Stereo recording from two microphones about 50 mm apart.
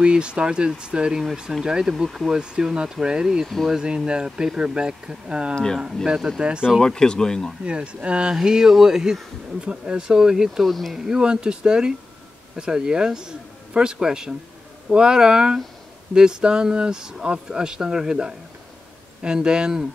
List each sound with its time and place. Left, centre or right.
0.0 s speech: centre
3.4 s speech: centre
3.7 s speech: centre
5.5 s speech: centre
6.0 s speech: centre
6.8 s speech: centre
7.6 s speech: right
8.4 s speech: centre
11.1 s a man's voice: centre